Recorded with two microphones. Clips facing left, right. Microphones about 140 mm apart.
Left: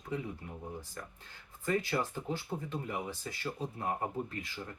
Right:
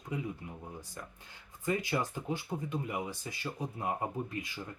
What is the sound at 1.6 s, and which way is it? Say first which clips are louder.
Speech: even; 15° right (ahead or behind).